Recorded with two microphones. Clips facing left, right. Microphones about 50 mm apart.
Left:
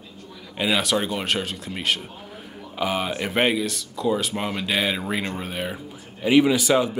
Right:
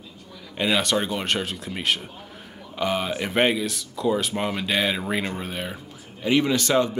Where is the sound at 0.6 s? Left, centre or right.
Centre.